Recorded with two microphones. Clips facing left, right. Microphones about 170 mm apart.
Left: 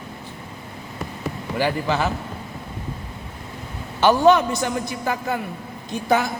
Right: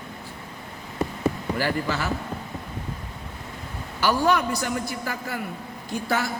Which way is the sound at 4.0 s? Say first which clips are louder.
Left 6 dB; 20° left (ahead or behind).